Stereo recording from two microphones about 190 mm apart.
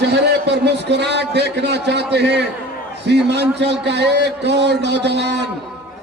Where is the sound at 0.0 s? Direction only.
65° right (ahead or behind).